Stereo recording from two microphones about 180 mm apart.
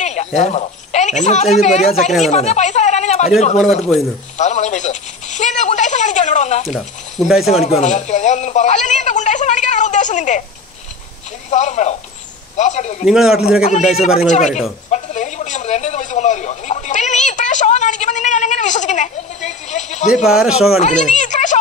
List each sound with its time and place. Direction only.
0.0 s a woman's voice: 40° left (ahead or behind)
2.2 s a sound: 40° left (ahead or behind)
3.3 s speech: 40° left (ahead or behind)
6.7 s speech: centre (ahead or behind)
7.4 s speech: 35° left (ahead or behind)
11.5 s speech: 40° left (ahead or behind)
13.0 s speech: 5° right (ahead or behind)
14.2 s speech: 40° left (ahead or behind)
20.2 s speech: 5° right (ahead or behind)
20.7 s speech: 40° left (ahead or behind)